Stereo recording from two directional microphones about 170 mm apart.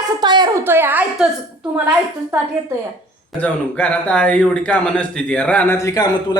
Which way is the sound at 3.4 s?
5° left (ahead or behind).